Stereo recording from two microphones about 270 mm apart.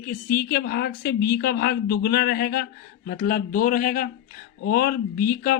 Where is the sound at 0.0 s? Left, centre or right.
Left.